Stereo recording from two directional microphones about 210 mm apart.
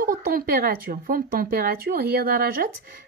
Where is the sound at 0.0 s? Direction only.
40° right (ahead or behind).